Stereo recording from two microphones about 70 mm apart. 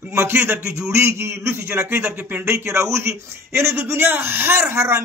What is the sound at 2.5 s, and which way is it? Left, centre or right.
A man's voice, right.